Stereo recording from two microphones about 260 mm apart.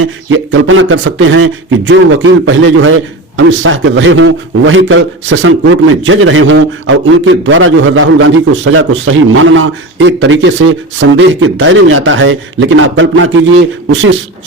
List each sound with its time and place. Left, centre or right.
0.3 s speech: right